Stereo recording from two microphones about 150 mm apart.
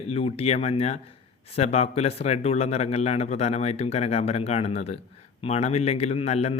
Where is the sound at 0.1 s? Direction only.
40° left (ahead or behind).